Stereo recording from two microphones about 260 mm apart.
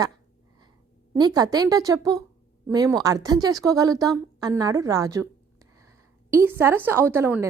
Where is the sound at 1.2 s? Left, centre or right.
Centre.